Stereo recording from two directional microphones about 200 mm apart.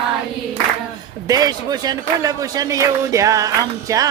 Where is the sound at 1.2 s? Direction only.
20° right (ahead or behind).